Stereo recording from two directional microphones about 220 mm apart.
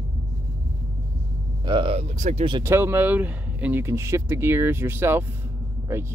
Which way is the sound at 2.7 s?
10° right (ahead or behind).